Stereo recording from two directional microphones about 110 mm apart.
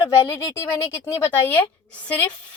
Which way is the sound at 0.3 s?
25° left (ahead or behind).